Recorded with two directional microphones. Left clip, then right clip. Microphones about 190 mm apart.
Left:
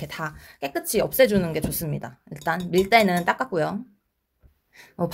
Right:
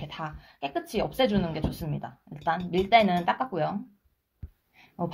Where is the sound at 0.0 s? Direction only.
50° left (ahead or behind).